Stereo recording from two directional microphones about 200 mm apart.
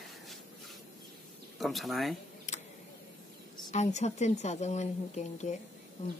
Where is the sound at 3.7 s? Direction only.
35° left (ahead or behind).